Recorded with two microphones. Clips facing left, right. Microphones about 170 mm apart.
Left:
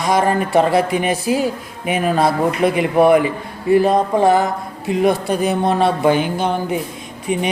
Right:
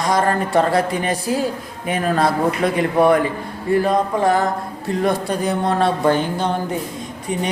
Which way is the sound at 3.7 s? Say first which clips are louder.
Left 4 dB; 20° left (ahead or behind).